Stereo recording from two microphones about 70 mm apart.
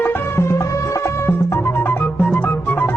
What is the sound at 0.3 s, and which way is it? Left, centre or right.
Music, left.